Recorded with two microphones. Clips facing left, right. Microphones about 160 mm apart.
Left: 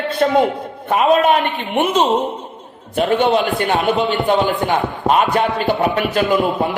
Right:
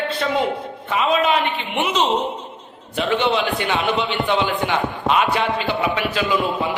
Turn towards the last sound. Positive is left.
turn(degrees=50)  # may be behind; listen again after turning